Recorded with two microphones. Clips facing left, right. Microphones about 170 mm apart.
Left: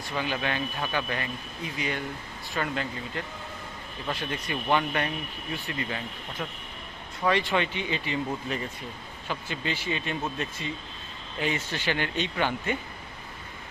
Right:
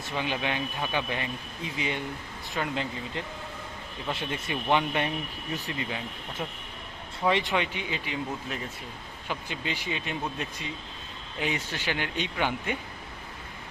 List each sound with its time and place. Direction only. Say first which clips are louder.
0.2 s speech: left 1 dB; 20° right (ahead or behind)
7.3 s a man's voice: left 1 dB; 20° right (ahead or behind)